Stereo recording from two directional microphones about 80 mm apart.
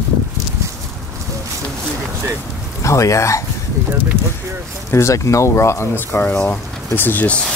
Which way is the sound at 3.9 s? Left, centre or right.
Right.